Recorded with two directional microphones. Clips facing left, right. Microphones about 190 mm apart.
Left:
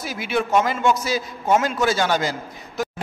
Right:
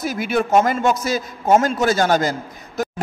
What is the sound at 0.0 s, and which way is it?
A man's voice, 45° right (ahead or behind).